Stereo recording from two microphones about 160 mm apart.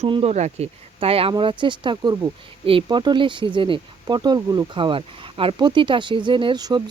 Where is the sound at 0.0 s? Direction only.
40° right (ahead or behind).